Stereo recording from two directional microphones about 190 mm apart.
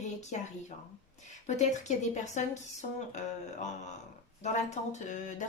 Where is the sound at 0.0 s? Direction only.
40° left (ahead or behind).